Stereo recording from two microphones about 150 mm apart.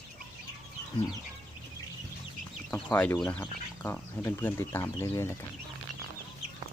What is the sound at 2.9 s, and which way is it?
Speech, 15° left (ahead or behind).